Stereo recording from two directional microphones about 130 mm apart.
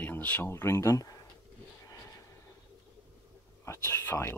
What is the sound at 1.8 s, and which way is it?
Vehicle, 25° left (ahead or behind).